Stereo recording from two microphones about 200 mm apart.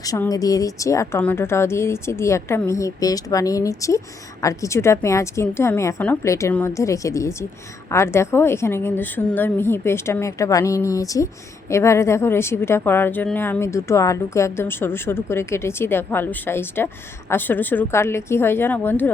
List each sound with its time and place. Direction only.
0.0 s a woman's voice: 15° left (ahead or behind)